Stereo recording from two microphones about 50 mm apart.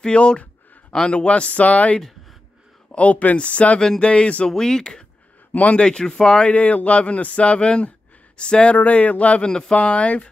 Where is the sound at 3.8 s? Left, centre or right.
Centre.